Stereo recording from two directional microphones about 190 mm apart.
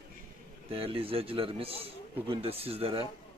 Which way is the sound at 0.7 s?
30° right (ahead or behind).